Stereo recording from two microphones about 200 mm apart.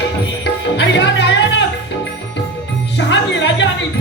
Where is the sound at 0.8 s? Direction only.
65° left (ahead or behind).